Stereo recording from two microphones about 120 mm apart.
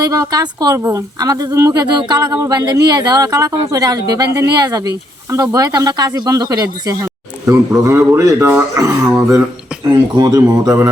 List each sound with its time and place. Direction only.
0.0 s speech: 30° right (ahead or behind)
9.9 s speech: 35° right (ahead or behind)